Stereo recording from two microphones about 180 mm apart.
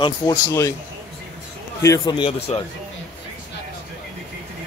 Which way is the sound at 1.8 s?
20° left (ahead or behind).